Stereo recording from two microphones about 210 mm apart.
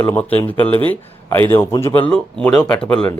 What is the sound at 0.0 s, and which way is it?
Speech, 10° left (ahead or behind).